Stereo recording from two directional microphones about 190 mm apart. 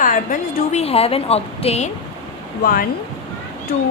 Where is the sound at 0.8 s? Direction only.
30° left (ahead or behind).